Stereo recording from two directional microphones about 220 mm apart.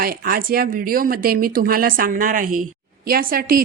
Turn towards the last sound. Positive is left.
turn(degrees=-40)  # may be behind; listen again after turning